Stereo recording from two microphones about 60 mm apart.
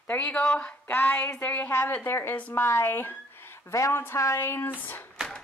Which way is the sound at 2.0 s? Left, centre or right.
Left.